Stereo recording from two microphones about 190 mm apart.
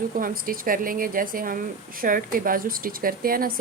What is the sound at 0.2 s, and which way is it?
A woman's voice, 50° right (ahead or behind).